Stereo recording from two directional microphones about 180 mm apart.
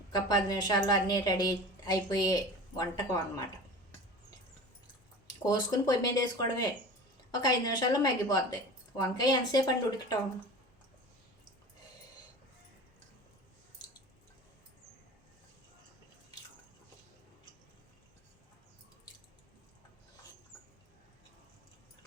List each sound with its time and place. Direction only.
0.1 s a woman's voice: 20° left (ahead or behind)
5.3 s a woman's voice: 25° left (ahead or behind)